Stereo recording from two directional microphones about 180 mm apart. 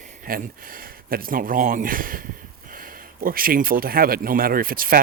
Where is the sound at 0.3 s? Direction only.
50° right (ahead or behind).